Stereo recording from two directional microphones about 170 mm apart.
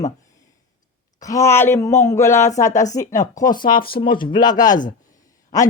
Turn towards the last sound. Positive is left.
turn(degrees=20)  # may be behind; listen again after turning